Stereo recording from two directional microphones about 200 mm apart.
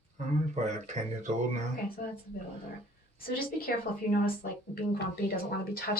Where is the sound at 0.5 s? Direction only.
35° right (ahead or behind).